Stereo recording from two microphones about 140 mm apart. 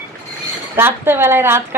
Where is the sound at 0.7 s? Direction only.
15° right (ahead or behind).